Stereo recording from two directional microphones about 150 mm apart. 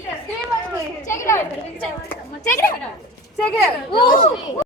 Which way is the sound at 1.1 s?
20° left (ahead or behind).